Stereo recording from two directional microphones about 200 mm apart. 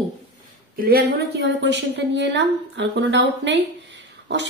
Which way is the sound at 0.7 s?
50° right (ahead or behind).